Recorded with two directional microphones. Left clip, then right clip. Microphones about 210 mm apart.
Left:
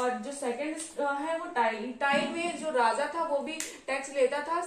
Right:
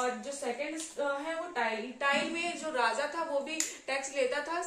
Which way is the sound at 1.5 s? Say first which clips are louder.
Left 5 dB; 15° right (ahead or behind).